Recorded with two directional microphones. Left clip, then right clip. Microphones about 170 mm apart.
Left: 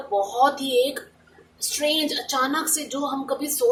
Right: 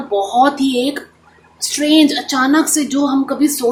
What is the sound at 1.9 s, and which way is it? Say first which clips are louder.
Speech: right 13 dB; 35° right (ahead or behind).